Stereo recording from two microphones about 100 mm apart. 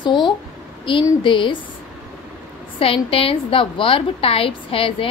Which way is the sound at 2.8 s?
70° left (ahead or behind).